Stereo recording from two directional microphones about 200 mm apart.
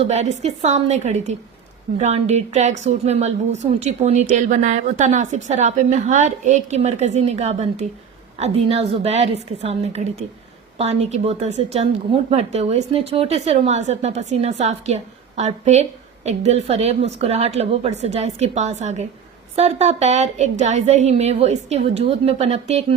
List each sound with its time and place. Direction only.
0.1 s a woman's voice: 35° right (ahead or behind)